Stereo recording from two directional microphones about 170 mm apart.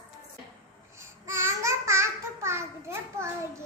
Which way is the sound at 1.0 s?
15° right (ahead or behind).